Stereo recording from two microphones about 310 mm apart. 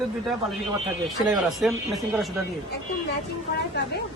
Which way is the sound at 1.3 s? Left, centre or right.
Centre.